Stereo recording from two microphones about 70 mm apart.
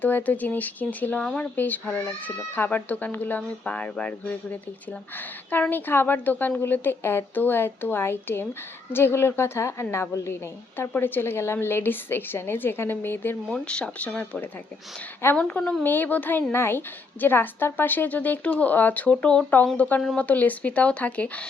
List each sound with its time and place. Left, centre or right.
0.0 s speech: left
1.2 s speech: centre
1.5 s a woman's voice: left
10.8 s a woman's voice: left
13.5 s speech: centre
15.4 s speech: centre